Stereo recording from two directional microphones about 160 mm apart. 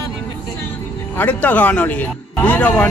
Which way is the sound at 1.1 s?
10° left (ahead or behind).